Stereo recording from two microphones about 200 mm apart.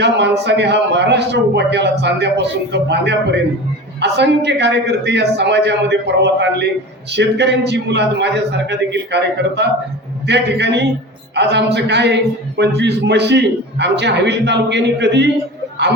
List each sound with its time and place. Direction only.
0.0 s a man's voice: 60° right (ahead or behind)